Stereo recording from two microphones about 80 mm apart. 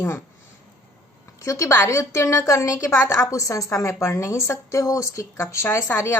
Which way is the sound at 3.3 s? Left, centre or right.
Left.